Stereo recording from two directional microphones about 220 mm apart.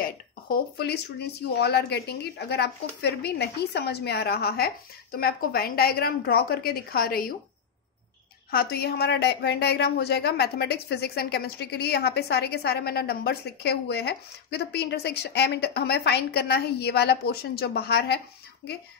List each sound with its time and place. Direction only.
0.0 s speech: 45° left (ahead or behind)
8.5 s speech: 45° left (ahead or behind)